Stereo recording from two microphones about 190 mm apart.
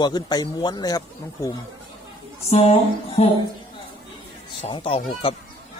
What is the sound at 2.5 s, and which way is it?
Speech, 35° left (ahead or behind).